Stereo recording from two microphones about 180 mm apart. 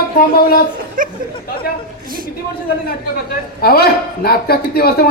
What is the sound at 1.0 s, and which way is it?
Chatter, 50° right (ahead or behind).